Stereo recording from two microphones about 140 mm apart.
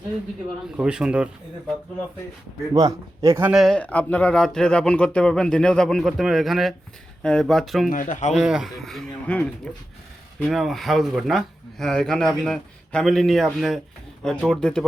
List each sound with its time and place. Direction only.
0.8 s speech: 5° right (ahead or behind)
2.7 s speech: 25° right (ahead or behind)
3.5 s speech: centre (ahead or behind)
7.9 s speech: 70° left (ahead or behind)
8.4 s speech: 5° right (ahead or behind)